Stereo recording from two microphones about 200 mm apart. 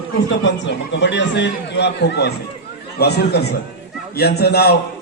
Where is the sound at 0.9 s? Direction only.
60° left (ahead or behind).